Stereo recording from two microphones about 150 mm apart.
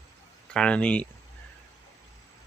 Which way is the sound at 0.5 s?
10° left (ahead or behind).